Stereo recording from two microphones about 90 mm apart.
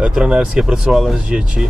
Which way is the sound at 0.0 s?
10° right (ahead or behind).